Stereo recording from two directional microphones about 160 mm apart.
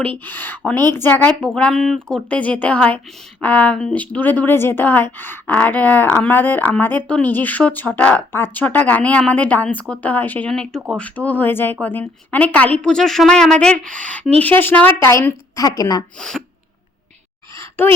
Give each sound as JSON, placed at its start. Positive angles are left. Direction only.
{"t": 0.0, "sound": "speech", "side_deg": 10}
{"t": 16.1, "sound": "speech", "side_deg": 5}
{"t": 17.5, "sound": "a sound", "side_deg": 15}